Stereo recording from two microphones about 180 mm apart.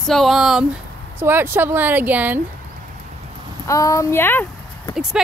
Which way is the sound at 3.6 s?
15° left (ahead or behind).